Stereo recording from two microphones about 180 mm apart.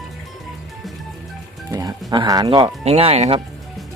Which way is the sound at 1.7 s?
20° right (ahead or behind).